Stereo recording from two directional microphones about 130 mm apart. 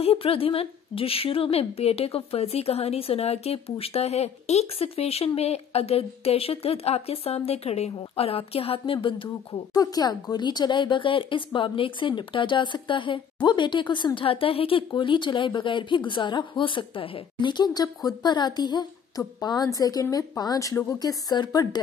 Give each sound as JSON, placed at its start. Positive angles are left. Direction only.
{"t": 0.0, "sound": "a woman's voice", "side_deg": 45}
{"t": 9.8, "sound": "speech", "side_deg": 30}